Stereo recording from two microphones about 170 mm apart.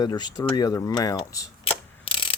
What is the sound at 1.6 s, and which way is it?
Ratchet, 30° left (ahead or behind).